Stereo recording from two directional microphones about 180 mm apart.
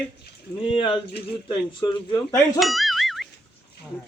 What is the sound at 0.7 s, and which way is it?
Speech, 25° left (ahead or behind).